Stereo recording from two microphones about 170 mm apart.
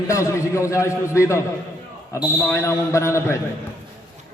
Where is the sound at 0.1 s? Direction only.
15° left (ahead or behind).